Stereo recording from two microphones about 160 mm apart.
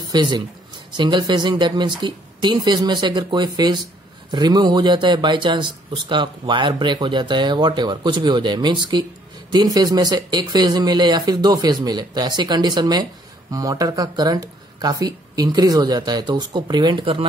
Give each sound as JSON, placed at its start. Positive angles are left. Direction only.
{"t": 0.0, "sound": "speech", "side_deg": -25}